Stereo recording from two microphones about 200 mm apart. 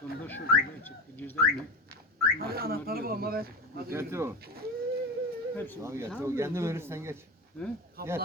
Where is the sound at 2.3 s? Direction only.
50° right (ahead or behind).